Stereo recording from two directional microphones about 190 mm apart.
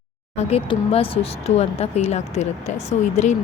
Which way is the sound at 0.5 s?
30° left (ahead or behind).